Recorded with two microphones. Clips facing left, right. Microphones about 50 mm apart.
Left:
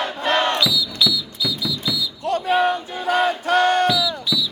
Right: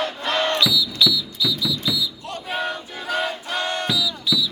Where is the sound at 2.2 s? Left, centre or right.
Left.